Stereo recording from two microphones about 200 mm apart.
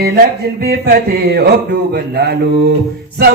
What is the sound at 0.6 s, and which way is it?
Speech, 50° right (ahead or behind).